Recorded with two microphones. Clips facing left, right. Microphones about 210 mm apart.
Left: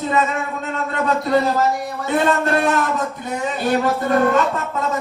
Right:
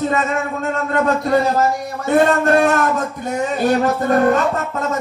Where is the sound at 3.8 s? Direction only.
45° right (ahead or behind).